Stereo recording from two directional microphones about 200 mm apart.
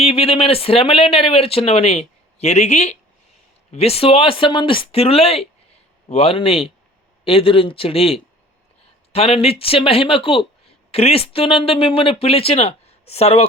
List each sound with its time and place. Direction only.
0.0 s speech: 30° left (ahead or behind)